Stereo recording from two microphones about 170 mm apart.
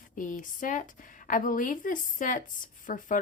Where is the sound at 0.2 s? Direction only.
50° left (ahead or behind).